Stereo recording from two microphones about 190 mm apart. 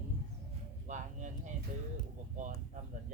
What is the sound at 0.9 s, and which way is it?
Speech, 40° right (ahead or behind).